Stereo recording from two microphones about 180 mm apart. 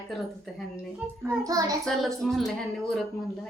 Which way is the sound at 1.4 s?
20° right (ahead or behind).